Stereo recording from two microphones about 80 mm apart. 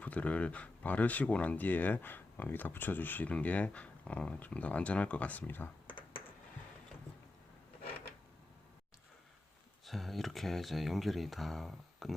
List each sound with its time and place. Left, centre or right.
0.0 s speech: centre
9.8 s speech: centre